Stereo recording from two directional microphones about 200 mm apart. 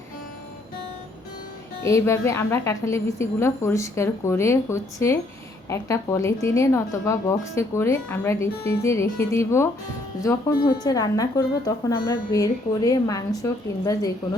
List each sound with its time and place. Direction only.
1.8 s speech: 15° left (ahead or behind)